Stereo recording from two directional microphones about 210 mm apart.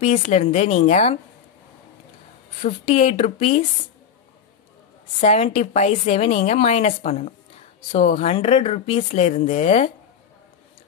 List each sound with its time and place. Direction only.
0.0 s a woman's voice: 35° left (ahead or behind)
2.6 s speech: 30° left (ahead or behind)
5.2 s a woman's voice: 30° left (ahead or behind)